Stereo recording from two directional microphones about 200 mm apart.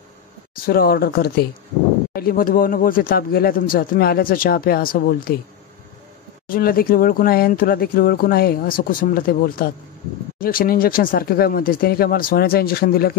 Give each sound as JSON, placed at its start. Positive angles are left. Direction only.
{"t": 0.6, "sound": "speech", "side_deg": 50}
{"t": 6.4, "sound": "speech", "side_deg": 45}